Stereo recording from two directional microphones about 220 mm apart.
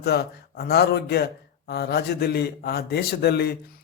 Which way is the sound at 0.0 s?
45° left (ahead or behind).